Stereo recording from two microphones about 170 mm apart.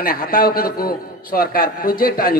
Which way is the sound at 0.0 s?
60° left (ahead or behind).